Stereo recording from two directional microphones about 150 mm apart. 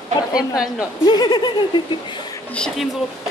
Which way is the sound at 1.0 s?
30° left (ahead or behind).